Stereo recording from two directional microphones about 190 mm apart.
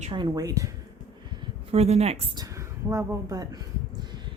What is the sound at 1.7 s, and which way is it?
Speech, 35° right (ahead or behind).